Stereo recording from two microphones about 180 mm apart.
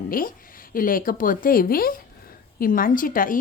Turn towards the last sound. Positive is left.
turn(degrees=50)  # may be behind; listen again after turning